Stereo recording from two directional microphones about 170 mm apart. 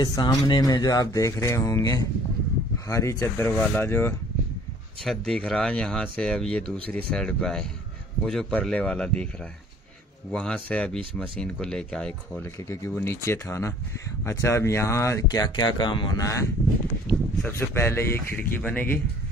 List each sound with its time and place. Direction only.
0.0 s speech: 25° left (ahead or behind)
5.0 s speech: 5° left (ahead or behind)
10.3 s speech: 5° left (ahead or behind)
12.6 s speech: 15° left (ahead or behind)